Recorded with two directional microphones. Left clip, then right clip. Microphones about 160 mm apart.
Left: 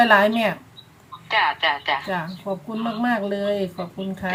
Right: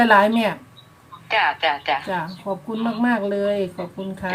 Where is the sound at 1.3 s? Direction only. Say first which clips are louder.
Right 1 dB; 20° right (ahead or behind).